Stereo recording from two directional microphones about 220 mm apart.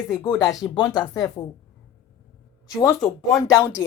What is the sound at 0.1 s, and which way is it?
Speech, 15° left (ahead or behind).